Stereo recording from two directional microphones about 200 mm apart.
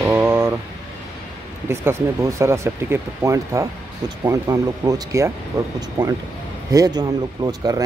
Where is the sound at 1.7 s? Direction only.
15° right (ahead or behind).